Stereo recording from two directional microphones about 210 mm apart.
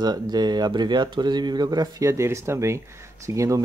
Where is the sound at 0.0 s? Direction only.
20° right (ahead or behind).